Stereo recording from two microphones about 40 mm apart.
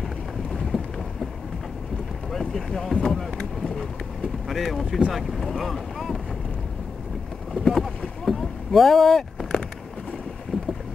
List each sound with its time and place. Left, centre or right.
0.0 s vehicle: centre
2.3 s speech: centre
4.5 s speech: centre
7.5 s boat: centre
10.5 s boat: centre